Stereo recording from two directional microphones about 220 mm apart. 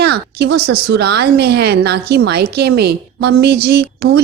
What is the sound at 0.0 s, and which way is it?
A woman's voice, 50° right (ahead or behind).